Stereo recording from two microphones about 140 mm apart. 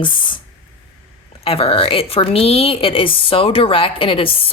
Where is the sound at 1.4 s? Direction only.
45° left (ahead or behind).